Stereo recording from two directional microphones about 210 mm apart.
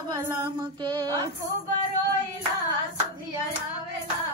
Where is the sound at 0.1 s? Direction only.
20° right (ahead or behind).